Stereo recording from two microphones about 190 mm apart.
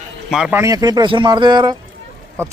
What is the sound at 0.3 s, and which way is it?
Speech, 5° right (ahead or behind).